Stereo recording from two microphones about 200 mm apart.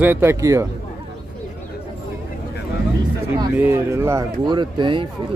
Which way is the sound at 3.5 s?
10° right (ahead or behind).